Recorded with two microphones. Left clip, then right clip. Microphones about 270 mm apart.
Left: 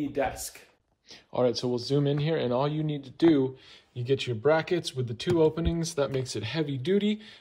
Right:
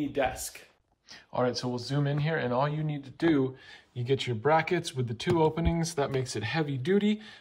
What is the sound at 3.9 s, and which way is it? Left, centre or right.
Speech, centre.